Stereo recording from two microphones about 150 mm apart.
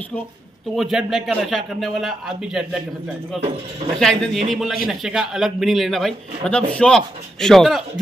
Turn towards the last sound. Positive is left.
turn(degrees=0)  # may be behind; listen again after turning